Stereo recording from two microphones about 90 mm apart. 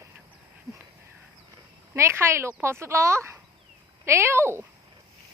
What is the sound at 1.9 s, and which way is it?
Speech, 30° right (ahead or behind).